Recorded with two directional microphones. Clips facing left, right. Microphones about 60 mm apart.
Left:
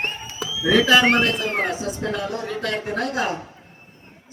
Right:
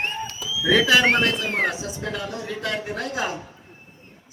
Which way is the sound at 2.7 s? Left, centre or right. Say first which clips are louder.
Left 3 dB; left.